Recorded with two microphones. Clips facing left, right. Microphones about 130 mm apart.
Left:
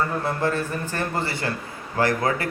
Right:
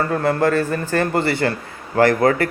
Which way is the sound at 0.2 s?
85° right.